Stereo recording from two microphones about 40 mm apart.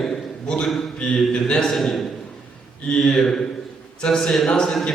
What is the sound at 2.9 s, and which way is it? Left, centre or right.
A man's voice, left.